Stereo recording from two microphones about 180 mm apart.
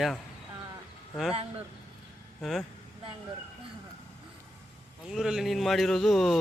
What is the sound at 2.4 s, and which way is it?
Speech, centre (ahead or behind).